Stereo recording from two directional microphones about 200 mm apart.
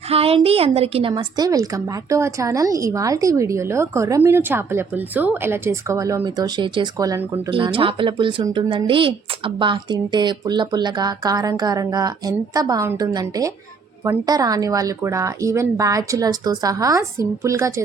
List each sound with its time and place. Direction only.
0.1 s a woman's voice: 30° right (ahead or behind)